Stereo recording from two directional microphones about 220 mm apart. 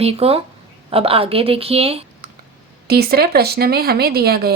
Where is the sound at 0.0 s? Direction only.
25° right (ahead or behind).